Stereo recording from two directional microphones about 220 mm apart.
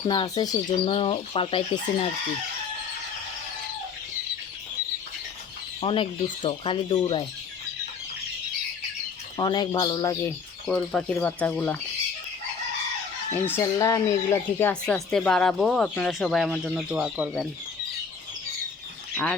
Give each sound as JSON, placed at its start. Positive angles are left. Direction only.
{"t": 0.1, "sound": "speech", "side_deg": 20}
{"t": 5.8, "sound": "speech", "side_deg": 25}
{"t": 9.4, "sound": "speech", "side_deg": 20}
{"t": 10.7, "sound": "speech", "side_deg": 5}
{"t": 13.3, "sound": "speech", "side_deg": 10}
{"t": 19.1, "sound": "speech", "side_deg": 5}